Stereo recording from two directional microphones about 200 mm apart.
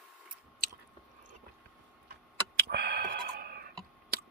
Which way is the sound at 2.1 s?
55° right (ahead or behind).